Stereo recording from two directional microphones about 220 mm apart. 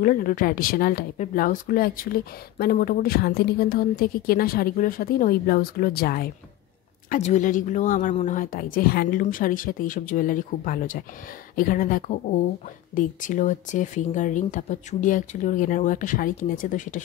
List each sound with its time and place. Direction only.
0.0 s a woman's voice: 40° left (ahead or behind)
7.1 s a woman's voice: 30° left (ahead or behind)